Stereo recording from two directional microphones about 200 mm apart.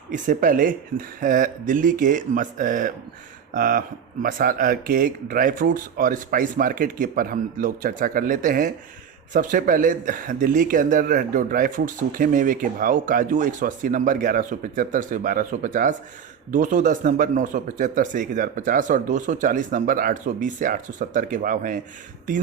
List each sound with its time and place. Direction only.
0.1 s speech: 40° right (ahead or behind)